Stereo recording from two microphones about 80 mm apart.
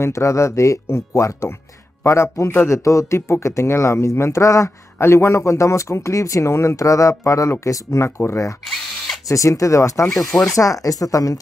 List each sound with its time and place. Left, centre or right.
0.0 s speech: left
10.0 s speech: centre
10.4 s speech: left